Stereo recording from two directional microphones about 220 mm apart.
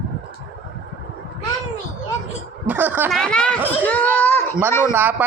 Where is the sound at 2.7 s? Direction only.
10° right (ahead or behind).